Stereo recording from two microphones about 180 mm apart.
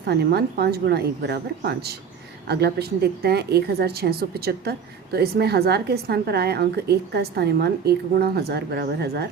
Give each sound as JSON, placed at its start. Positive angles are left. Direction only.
{"t": 0.0, "sound": "a woman's voice", "side_deg": -65}